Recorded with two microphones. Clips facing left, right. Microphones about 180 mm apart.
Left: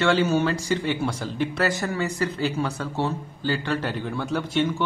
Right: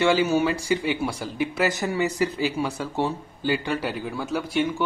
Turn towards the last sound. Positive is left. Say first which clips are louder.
# left 1 dB
turn(degrees=-10)  # may be behind; listen again after turning